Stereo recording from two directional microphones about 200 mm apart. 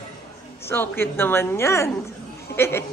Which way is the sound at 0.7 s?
10° left (ahead or behind).